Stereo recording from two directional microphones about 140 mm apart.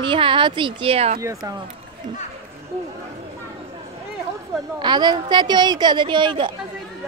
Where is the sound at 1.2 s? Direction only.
25° right (ahead or behind).